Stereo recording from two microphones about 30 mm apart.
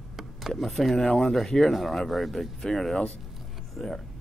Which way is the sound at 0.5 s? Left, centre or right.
Centre.